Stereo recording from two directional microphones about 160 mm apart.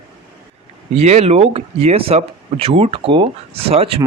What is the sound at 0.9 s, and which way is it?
Speech, 40° right (ahead or behind).